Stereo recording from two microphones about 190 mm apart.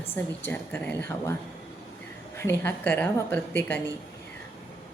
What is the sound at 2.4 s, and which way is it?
Speech, 15° left (ahead or behind).